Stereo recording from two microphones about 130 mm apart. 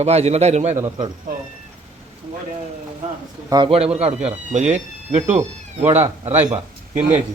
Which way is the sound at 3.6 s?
50° right (ahead or behind).